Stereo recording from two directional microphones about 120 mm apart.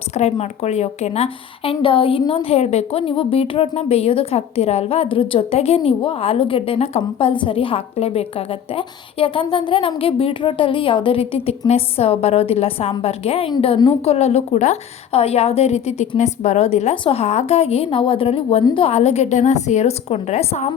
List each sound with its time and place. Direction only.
0.1 s a woman's voice: 65° left (ahead or behind)
7.0 s a woman's voice: 45° left (ahead or behind); by 16.9 s 65° left (ahead or behind)
16.9 s a woman's voice: 50° left (ahead or behind); by 20.6 s 65° left (ahead or behind)